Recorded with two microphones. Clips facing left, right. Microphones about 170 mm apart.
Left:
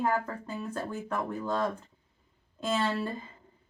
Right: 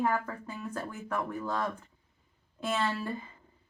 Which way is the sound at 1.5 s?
25° left (ahead or behind).